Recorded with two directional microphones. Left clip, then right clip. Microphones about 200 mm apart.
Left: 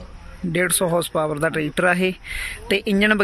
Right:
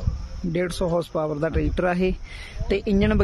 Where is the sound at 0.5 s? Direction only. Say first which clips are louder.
Left 4 dB; 5° right (ahead or behind).